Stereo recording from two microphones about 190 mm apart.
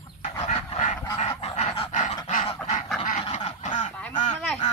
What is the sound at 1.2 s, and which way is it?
Goose, 30° left (ahead or behind).